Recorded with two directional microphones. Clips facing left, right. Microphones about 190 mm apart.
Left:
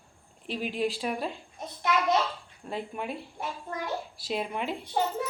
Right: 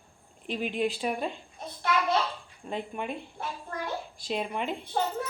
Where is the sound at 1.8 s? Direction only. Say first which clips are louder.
Left 1 dB; 20° left (ahead or behind).